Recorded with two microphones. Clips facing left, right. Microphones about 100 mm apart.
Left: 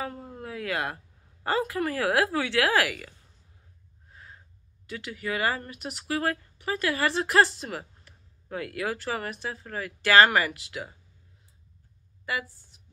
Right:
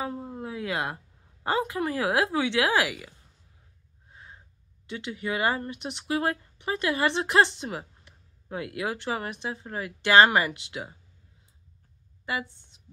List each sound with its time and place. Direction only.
0.0 s a woman's voice: 15° right (ahead or behind)
12.3 s a woman's voice: 25° right (ahead or behind)